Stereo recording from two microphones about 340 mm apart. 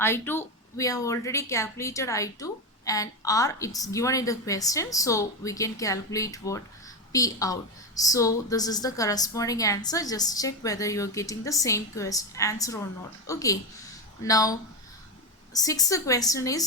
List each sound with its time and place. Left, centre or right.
0.0 s speech: centre
15.5 s speech: centre